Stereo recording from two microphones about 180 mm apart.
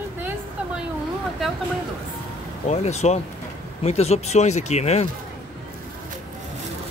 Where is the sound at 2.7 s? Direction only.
40° left (ahead or behind).